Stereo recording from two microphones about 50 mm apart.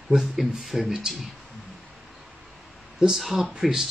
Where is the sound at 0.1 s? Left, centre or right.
Centre.